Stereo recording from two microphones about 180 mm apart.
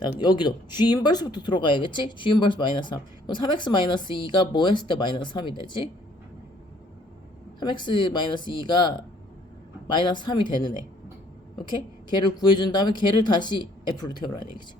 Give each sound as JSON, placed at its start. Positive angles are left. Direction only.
{"t": 0.2, "sound": "speech", "side_deg": 25}
{"t": 7.6, "sound": "speech", "side_deg": 25}